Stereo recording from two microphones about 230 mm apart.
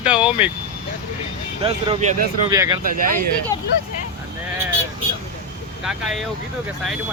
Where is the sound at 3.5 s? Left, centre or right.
Centre.